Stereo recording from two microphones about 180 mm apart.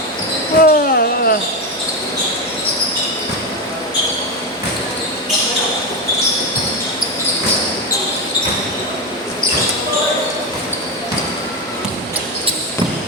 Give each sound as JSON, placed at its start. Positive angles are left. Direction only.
{"t": 0.6, "sound": "basketball bounce", "side_deg": 60}